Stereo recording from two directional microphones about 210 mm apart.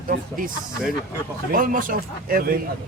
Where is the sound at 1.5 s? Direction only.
40° right (ahead or behind).